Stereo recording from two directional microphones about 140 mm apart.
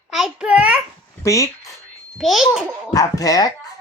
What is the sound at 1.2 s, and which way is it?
Speech, 25° left (ahead or behind).